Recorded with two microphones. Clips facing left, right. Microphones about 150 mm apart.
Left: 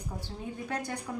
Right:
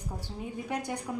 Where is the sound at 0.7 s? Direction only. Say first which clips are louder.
Right 2 dB; 15° right (ahead or behind).